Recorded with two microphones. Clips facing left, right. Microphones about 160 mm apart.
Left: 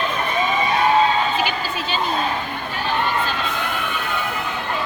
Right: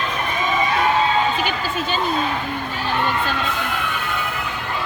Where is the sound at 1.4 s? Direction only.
50° right (ahead or behind).